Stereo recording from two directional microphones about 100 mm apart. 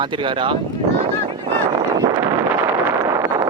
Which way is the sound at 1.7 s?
40° right (ahead or behind).